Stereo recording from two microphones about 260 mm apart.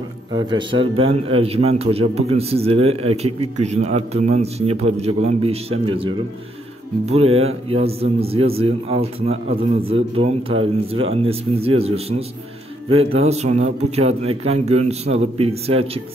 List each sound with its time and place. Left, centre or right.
0.3 s a man's voice: centre